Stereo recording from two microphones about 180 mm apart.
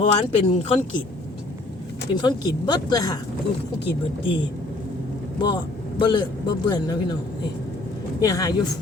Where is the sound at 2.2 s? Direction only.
25° left (ahead or behind).